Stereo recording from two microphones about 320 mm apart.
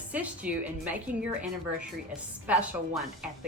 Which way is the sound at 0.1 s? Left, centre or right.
Centre.